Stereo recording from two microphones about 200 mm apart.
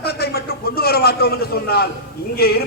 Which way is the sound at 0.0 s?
55° left (ahead or behind).